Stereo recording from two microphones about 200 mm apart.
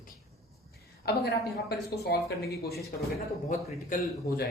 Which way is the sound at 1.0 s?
55° left (ahead or behind).